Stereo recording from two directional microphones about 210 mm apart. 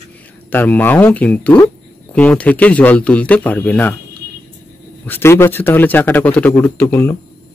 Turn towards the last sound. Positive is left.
turn(degrees=10)  # may be behind; listen again after turning